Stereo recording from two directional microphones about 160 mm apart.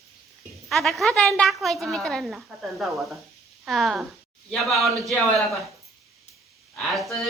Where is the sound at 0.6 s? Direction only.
Centre (ahead or behind).